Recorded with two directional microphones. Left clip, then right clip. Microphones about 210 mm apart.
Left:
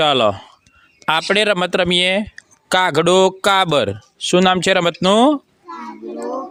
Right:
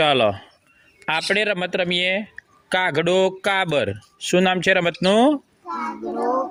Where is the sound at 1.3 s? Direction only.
35° left (ahead or behind); by 5.4 s 15° left (ahead or behind).